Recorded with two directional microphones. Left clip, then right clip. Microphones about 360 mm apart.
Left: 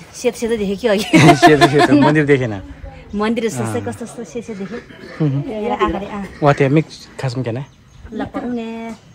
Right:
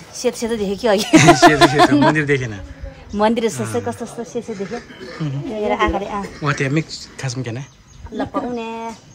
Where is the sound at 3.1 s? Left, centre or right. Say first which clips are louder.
Right 2 dB; centre.